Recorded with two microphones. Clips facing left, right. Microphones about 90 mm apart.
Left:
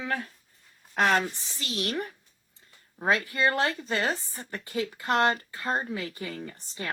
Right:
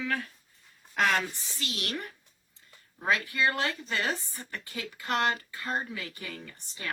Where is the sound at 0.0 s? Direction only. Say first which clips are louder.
Left 1 dB; 30° left (ahead or behind).